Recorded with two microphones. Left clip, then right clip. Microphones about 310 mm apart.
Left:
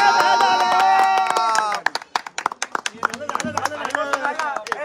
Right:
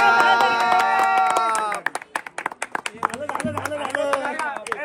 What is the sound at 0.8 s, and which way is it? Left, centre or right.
Music, centre.